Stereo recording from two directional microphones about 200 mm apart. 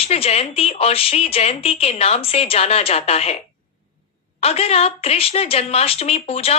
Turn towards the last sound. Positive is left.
turn(degrees=30)  # may be behind; listen again after turning